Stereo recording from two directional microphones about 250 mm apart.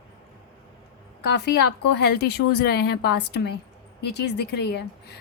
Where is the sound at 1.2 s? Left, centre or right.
Left.